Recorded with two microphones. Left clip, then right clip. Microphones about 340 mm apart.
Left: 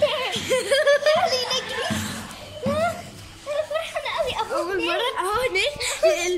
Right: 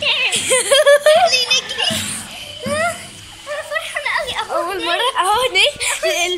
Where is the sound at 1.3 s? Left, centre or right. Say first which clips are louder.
Right 8 dB; left.